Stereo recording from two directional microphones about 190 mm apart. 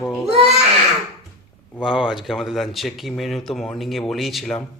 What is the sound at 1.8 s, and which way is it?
Speech, centre (ahead or behind).